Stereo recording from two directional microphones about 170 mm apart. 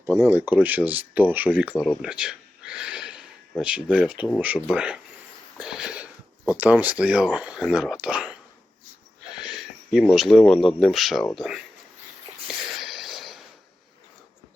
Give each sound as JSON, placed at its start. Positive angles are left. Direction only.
{"t": 0.0, "sound": "speech", "side_deg": -15}
{"t": 1.7, "sound": "speech", "side_deg": 10}
{"t": 2.0, "sound": "a sound", "side_deg": -5}
{"t": 3.6, "sound": "speech", "side_deg": -5}
{"t": 5.5, "sound": "sniff", "side_deg": -5}
{"t": 6.6, "sound": "speech", "side_deg": -10}
{"t": 9.4, "sound": "speech", "side_deg": 0}
{"t": 12.5, "sound": "snort", "side_deg": 0}